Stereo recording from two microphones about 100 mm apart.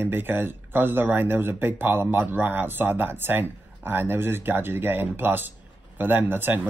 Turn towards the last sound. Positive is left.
turn(degrees=-20)  # may be behind; listen again after turning